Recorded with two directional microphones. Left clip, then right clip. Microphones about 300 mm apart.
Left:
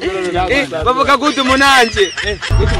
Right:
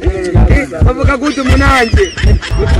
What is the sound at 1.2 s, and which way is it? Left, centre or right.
Speech, centre.